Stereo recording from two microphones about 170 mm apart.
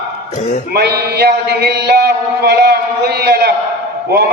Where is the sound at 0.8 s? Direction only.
70° right (ahead or behind).